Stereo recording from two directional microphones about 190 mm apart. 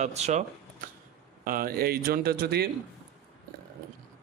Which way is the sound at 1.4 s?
50° right (ahead or behind).